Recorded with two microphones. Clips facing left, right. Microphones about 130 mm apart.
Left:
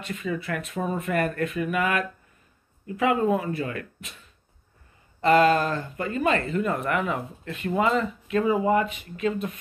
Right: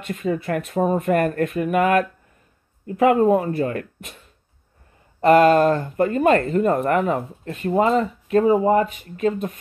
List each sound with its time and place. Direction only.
0.0 s speech: 45° right (ahead or behind)
5.2 s speech: 50° right (ahead or behind)